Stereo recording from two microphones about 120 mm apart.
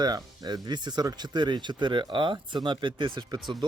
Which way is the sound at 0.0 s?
35° right (ahead or behind).